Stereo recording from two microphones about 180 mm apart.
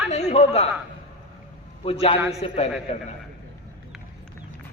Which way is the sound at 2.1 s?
10° right (ahead or behind).